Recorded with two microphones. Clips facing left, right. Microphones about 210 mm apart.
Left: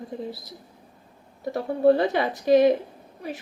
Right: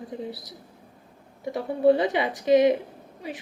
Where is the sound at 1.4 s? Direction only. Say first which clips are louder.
Left 1 dB; 15° right (ahead or behind).